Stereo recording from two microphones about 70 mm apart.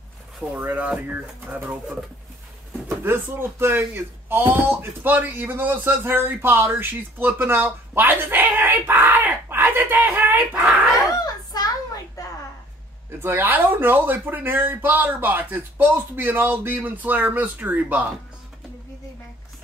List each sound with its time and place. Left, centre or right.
0.6 s speech: right
3.0 s speech: right
11.1 s a sound: left
13.2 s speech: right